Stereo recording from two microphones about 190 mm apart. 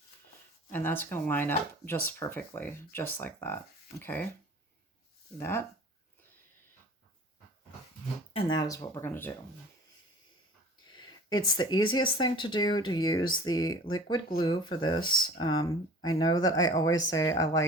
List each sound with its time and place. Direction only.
0.7 s speech: 10° left (ahead or behind)
5.4 s speech: 10° left (ahead or behind)
8.3 s speech: 30° left (ahead or behind)
8.5 s speech: 15° left (ahead or behind)
10.9 s a sound: 25° left (ahead or behind)
11.9 s speech: 25° left (ahead or behind)